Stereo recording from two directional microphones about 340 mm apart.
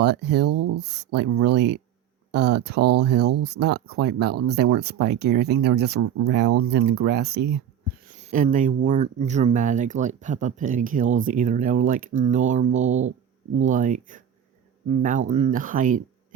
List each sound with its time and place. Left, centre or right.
0.0 s speech: right
0.4 s speech: right
0.8 s speech: right
7.0 s speech: right